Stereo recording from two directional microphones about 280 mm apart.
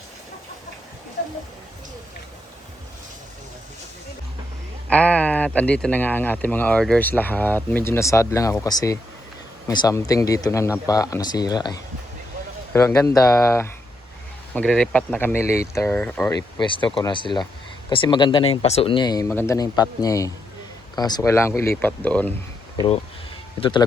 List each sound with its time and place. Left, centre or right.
4.9 s speech: centre
16.6 s speech: centre
23.6 s speech: centre